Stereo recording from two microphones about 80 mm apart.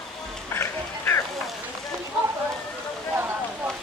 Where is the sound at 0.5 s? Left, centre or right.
Left.